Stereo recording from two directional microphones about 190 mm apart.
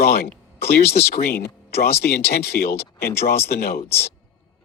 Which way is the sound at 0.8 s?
10° left (ahead or behind).